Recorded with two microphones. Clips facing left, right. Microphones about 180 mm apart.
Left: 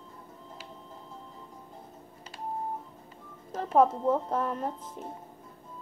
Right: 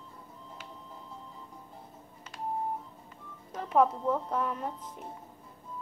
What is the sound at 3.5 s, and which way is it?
Speech, 35° left (ahead or behind).